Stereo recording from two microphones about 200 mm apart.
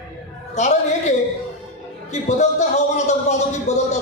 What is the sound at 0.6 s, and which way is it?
Speech, 35° left (ahead or behind).